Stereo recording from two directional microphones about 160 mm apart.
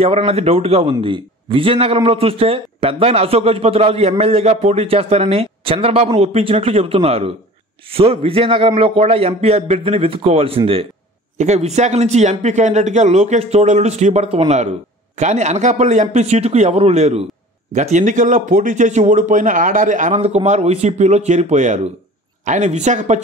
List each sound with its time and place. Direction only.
0.0 s a man's voice: 40° right (ahead or behind)